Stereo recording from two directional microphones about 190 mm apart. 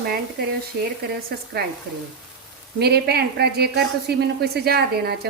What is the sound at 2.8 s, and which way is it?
Speech, 60° right (ahead or behind).